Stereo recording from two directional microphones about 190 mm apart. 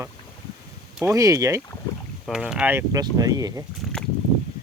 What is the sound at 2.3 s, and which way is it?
Speech, 5° right (ahead or behind).